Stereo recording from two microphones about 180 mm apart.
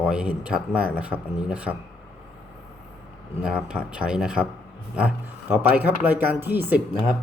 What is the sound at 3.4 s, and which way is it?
Speech, 5° right (ahead or behind).